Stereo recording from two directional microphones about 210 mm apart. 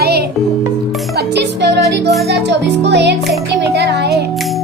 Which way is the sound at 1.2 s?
55° right (ahead or behind).